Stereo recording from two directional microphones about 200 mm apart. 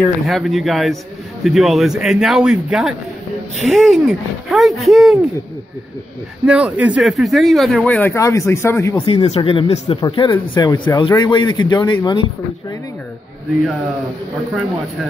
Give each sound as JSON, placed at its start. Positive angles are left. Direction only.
{"t": 0.0, "sound": "speech", "side_deg": 0}
{"t": 6.4, "sound": "speech", "side_deg": -5}
{"t": 8.9, "sound": "speech", "side_deg": 30}